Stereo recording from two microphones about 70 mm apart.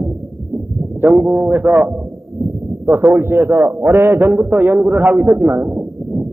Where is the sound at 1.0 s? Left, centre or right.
Right.